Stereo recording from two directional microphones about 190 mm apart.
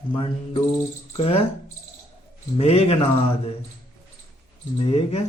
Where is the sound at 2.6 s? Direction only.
30° left (ahead or behind).